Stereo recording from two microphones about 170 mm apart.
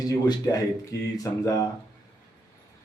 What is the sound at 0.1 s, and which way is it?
A man's voice, 20° left (ahead or behind).